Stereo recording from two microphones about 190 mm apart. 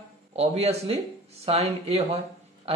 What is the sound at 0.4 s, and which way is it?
Speech, 35° right (ahead or behind).